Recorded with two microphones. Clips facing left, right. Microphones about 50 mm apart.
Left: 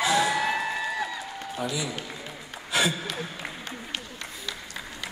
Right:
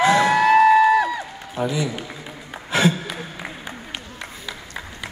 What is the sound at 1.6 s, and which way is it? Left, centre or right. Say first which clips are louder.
Speech: right 8 dB; right.